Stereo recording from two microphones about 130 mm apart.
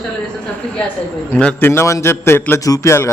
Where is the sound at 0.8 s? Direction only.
10° left (ahead or behind).